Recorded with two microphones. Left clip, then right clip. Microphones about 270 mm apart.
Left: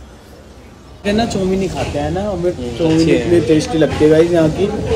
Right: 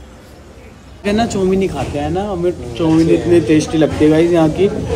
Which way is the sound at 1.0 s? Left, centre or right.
Centre.